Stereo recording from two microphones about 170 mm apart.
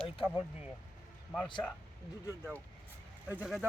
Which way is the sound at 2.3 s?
15° right (ahead or behind).